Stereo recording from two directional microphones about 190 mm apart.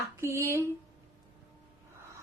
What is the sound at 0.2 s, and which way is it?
Speech, 15° right (ahead or behind).